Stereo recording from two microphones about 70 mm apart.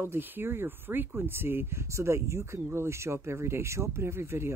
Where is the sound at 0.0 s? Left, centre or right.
Right.